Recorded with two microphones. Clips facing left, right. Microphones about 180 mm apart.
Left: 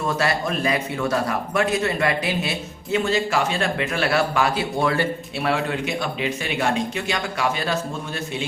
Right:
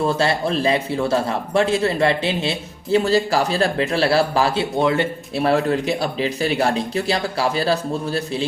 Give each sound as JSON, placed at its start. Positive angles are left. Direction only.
{"t": 0.0, "sound": "a man's voice", "side_deg": -30}
{"t": 5.4, "sound": "a man's voice", "side_deg": -40}